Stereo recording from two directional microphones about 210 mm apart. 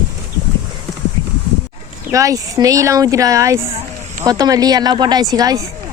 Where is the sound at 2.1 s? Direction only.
15° right (ahead or behind).